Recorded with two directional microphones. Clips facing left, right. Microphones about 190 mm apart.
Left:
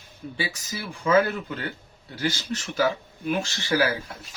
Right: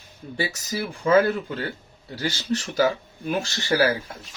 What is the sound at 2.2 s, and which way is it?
Speech, 35° right (ahead or behind).